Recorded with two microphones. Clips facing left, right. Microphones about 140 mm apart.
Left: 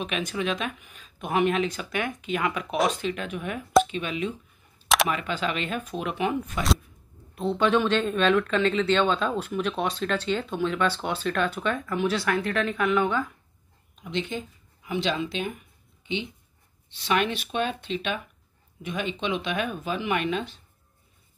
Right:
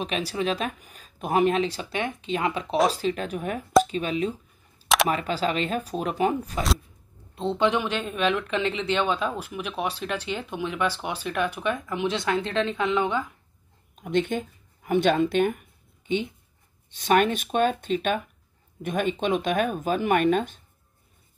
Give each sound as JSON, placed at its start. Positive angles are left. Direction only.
{"t": 0.0, "sound": "speech", "side_deg": -35}
{"t": 3.8, "sound": "a sound", "side_deg": -40}
{"t": 5.0, "sound": "speech", "side_deg": -35}
{"t": 7.3, "sound": "speech", "side_deg": -20}
{"t": 13.9, "sound": "speech", "side_deg": -50}